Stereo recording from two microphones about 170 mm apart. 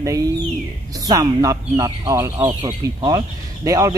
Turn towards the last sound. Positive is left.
turn(degrees=-20)  # may be behind; listen again after turning